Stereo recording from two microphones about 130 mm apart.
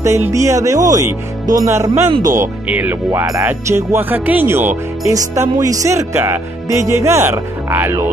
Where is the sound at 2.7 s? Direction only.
15° right (ahead or behind).